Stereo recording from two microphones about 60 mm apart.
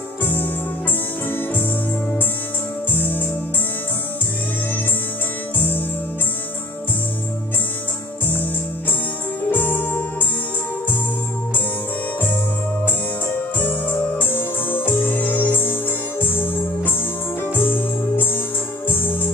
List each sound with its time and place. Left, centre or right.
0.2 s music: left
2.9 s music: left
5.6 s music: left
9.5 s music: left
12.8 s music: left